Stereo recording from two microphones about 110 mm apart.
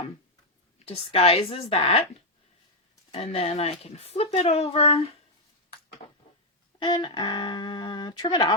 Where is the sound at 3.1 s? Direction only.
65° left (ahead or behind).